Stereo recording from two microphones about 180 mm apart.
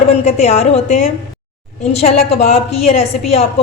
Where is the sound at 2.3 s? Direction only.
35° left (ahead or behind).